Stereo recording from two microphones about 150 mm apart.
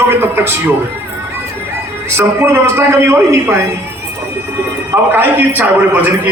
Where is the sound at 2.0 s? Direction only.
15° right (ahead or behind).